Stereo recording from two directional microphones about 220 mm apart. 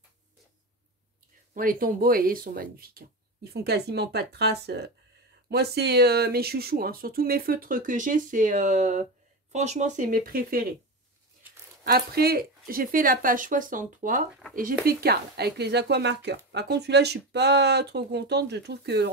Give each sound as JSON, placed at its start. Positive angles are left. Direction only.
{"t": 1.5, "sound": "speech", "side_deg": -40}
{"t": 11.8, "sound": "speech", "side_deg": -45}